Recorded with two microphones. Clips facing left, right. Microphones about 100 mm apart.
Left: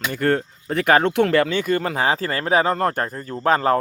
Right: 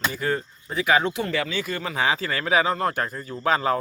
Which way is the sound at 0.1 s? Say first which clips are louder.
Left 6 dB; 60° left (ahead or behind).